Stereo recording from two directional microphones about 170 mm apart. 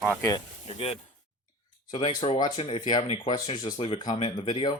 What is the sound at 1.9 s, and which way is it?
Speech, 30° left (ahead or behind).